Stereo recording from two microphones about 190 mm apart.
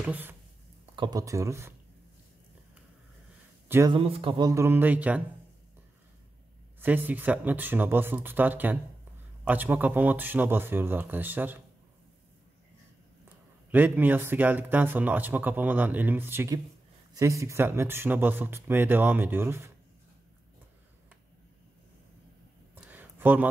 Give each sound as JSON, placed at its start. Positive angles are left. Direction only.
{"t": 0.0, "sound": "speech", "side_deg": -10}
{"t": 0.9, "sound": "speech", "side_deg": -20}
{"t": 3.6, "sound": "speech", "side_deg": -10}
{"t": 3.9, "sound": "speech", "side_deg": -30}
{"t": 6.8, "sound": "speech", "side_deg": -10}
{"t": 13.7, "sound": "speech", "side_deg": -10}
{"t": 22.8, "sound": "a sound", "side_deg": -10}